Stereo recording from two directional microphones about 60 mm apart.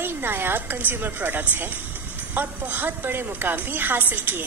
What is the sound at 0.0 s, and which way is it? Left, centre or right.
A woman's voice, right.